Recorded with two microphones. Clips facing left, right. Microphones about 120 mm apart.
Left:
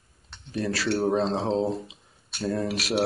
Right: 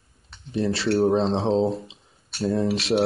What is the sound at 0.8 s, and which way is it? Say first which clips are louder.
Speech: right 4 dB; centre (ahead or behind).